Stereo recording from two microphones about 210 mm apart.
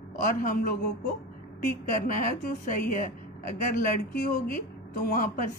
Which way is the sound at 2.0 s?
40° left (ahead or behind).